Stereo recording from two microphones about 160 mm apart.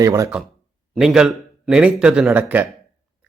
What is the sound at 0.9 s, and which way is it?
A man's voice, 5° right (ahead or behind).